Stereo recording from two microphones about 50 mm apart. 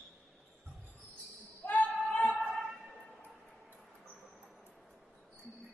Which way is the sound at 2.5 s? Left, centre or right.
Centre.